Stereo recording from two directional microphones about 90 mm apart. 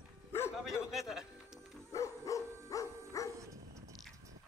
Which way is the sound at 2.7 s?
40° left (ahead or behind).